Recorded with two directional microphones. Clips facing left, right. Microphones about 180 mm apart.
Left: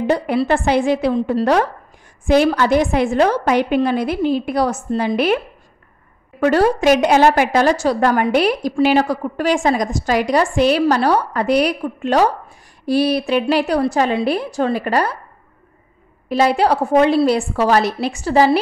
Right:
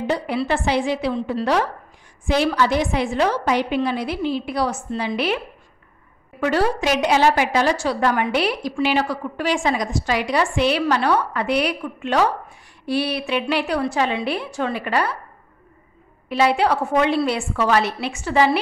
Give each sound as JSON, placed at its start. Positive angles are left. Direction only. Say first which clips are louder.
{"t": 0.0, "sound": "a woman's voice", "louder": "left 5 dB", "side_deg": 50}
{"t": 6.4, "sound": "a woman's voice", "louder": "left 6 dB", "side_deg": 45}
{"t": 16.3, "sound": "a woman's voice", "louder": "left 3 dB", "side_deg": 40}